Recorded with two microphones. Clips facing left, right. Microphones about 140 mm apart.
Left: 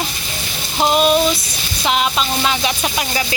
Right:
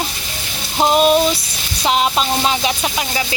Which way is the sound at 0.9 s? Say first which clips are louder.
Right 1 dB; 40° right (ahead or behind).